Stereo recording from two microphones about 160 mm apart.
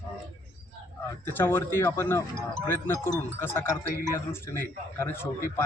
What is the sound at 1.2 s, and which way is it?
Speech, 15° left (ahead or behind).